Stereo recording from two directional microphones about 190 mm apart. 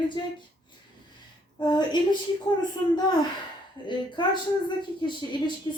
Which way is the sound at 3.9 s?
25° left (ahead or behind).